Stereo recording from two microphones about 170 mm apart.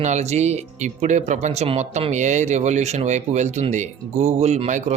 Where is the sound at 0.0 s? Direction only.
45° right (ahead or behind).